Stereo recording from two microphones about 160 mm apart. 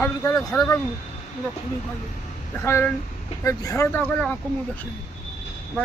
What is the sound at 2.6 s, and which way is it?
Speech, 15° left (ahead or behind).